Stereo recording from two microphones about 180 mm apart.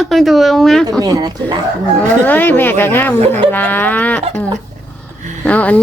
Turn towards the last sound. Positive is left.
turn(degrees=10)  # may be behind; listen again after turning